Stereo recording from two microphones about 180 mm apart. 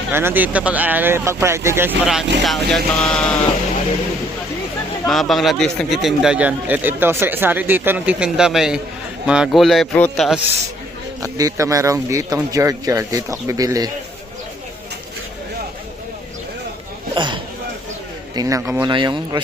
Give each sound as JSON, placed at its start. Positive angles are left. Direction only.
{"t": 0.1, "sound": "speech", "side_deg": -10}
{"t": 5.0, "sound": "speech", "side_deg": 0}
{"t": 11.2, "sound": "speech", "side_deg": -20}
{"t": 17.2, "sound": "speech", "side_deg": -25}